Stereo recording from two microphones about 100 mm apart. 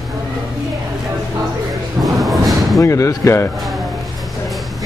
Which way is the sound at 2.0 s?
Centre (ahead or behind).